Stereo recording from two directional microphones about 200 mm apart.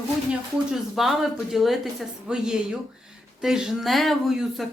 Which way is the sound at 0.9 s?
Centre (ahead or behind).